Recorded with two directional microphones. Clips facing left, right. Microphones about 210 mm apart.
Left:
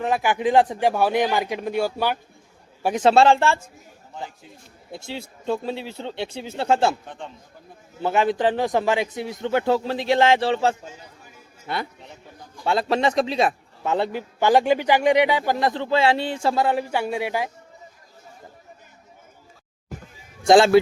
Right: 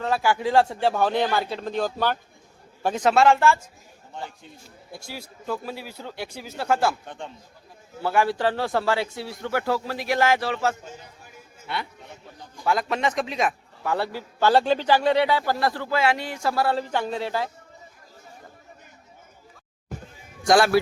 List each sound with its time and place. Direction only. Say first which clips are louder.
0.0 s speech: left 2 dB; 20° left (ahead or behind)
3.0 s a man's voice: left 2 dB; 30° left (ahead or behind)
4.9 s a man's voice: left 5 dB; 25° left (ahead or behind)
7.0 s a man's voice: even; centre (ahead or behind)
8.0 s a man's voice: left 2 dB; 20° left (ahead or behind)
11.7 s a man's voice: left 3 dB; 40° left (ahead or behind)
12.6 s a man's voice: left 3 dB; 30° left (ahead or behind); by 17.5 s 15° left (ahead or behind)
20.5 s a man's voice: left 4 dB; 25° left (ahead or behind)